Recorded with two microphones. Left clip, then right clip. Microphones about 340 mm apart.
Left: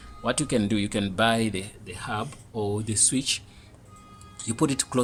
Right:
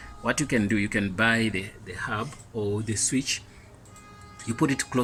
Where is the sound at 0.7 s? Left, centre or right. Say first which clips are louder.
Right 1 dB; left.